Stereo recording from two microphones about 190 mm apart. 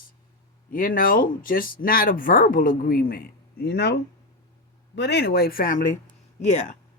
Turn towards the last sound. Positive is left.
turn(degrees=40)  # may be behind; listen again after turning